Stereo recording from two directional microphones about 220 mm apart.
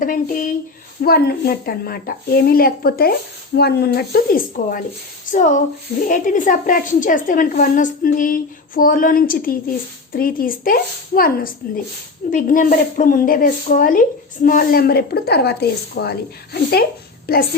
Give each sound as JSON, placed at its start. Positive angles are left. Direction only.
{"t": 0.0, "sound": "a woman's voice", "side_deg": 40}